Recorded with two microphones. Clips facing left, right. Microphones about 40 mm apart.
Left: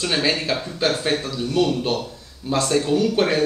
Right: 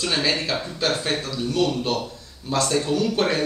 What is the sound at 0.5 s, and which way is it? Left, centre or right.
Speech, centre.